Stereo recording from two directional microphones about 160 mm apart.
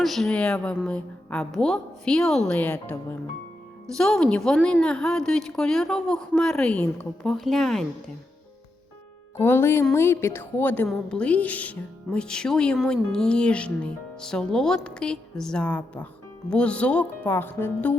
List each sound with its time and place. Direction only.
0.0 s speech: centre (ahead or behind)
3.9 s speech: 5° left (ahead or behind)
9.4 s speech: 15° left (ahead or behind)